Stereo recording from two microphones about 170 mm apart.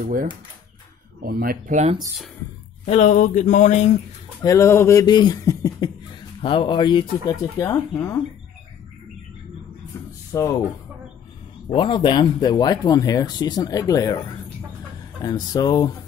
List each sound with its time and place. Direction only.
0.0 s speech: 55° right (ahead or behind)
2.8 s speech: 45° left (ahead or behind)
4.4 s speech: 15° left (ahead or behind)
6.4 s speech: 30° left (ahead or behind)
10.3 s speech: 15° left (ahead or behind)
11.7 s speech: 30° left (ahead or behind)
15.2 s speech: 20° left (ahead or behind)